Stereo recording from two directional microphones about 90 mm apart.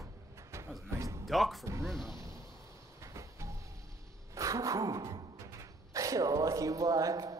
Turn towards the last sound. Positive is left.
turn(degrees=-40)  # may be behind; listen again after turning